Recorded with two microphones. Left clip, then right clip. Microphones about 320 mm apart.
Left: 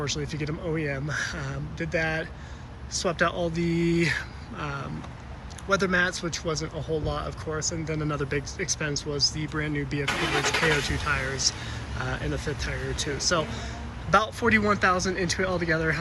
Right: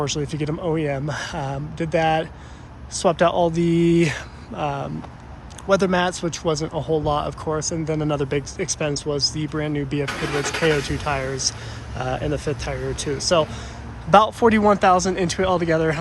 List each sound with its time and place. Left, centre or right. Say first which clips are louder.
0.0 s speech: right 6 dB; centre
7.7 s speech: right 7 dB; centre
10.1 s speech: right 1 dB; left
10.7 s speech: right 4 dB; centre